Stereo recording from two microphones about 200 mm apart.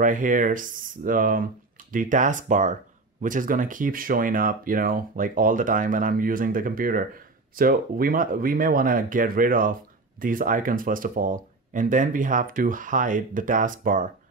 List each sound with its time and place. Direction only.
0.0 s speech: 40° right (ahead or behind)